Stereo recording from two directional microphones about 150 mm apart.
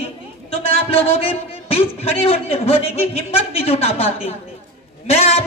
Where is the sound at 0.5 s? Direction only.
40° left (ahead or behind).